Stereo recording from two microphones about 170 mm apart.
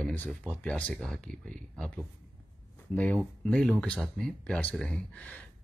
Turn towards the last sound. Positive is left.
turn(degrees=10)  # may be behind; listen again after turning